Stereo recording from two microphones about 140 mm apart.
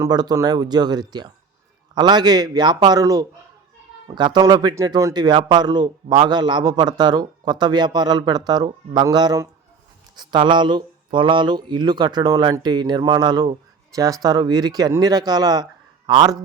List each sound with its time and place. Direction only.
0.0 s speech: 30° right (ahead or behind)